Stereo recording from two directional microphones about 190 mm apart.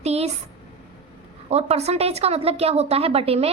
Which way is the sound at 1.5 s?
35° right (ahead or behind).